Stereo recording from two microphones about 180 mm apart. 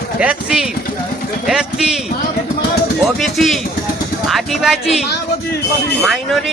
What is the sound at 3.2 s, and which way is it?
Speech, centre (ahead or behind).